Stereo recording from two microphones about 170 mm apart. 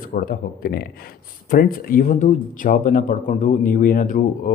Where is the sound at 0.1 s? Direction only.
60° left (ahead or behind).